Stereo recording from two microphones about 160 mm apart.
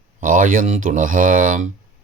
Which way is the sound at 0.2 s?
55° right (ahead or behind).